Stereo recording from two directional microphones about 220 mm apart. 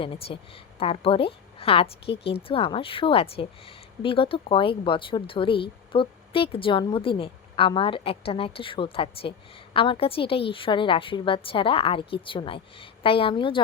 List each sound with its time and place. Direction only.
0.0 s a woman's voice: 25° left (ahead or behind)